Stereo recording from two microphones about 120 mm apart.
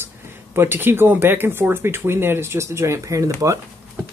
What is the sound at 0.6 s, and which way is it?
Speech, 20° right (ahead or behind).